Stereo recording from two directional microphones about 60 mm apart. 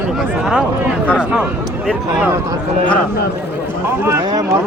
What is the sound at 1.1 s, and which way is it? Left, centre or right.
Speech, centre.